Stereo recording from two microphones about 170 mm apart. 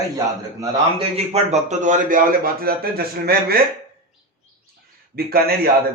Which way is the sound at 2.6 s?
65° right (ahead or behind).